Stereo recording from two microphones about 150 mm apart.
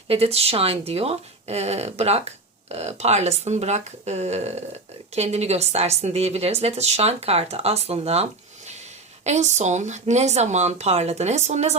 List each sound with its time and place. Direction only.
0.1 s speech: 40° right (ahead or behind)